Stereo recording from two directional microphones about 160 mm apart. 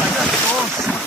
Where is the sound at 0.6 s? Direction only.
15° right (ahead or behind).